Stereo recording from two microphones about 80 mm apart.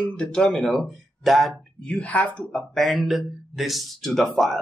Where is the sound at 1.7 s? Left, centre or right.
Centre.